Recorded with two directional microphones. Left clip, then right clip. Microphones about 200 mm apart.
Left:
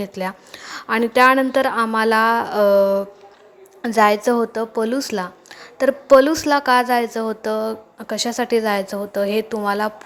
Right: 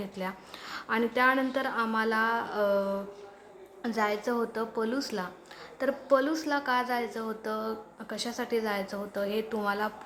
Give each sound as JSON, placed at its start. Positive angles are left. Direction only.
{"t": 0.0, "sound": "a woman's voice", "side_deg": 30}